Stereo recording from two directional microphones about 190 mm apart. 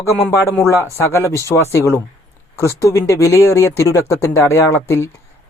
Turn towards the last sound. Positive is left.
turn(degrees=15)  # may be behind; listen again after turning